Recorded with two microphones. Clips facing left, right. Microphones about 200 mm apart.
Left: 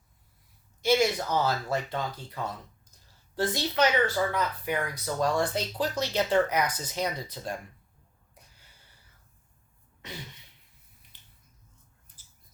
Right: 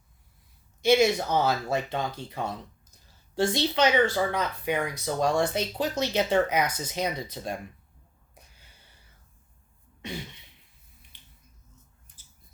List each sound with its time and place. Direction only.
0.8 s speech: 25° right (ahead or behind)
3.5 s speech: 25° right (ahead or behind)